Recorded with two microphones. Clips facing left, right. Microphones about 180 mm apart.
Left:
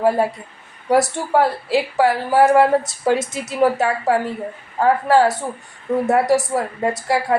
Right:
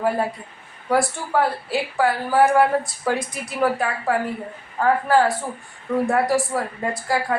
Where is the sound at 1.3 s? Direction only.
25° left (ahead or behind).